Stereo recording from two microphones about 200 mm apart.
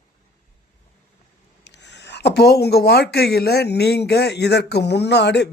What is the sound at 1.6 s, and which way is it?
Speech, 60° left (ahead or behind).